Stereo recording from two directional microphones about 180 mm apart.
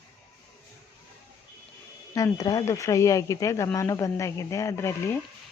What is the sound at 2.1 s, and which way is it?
Speech, 20° left (ahead or behind).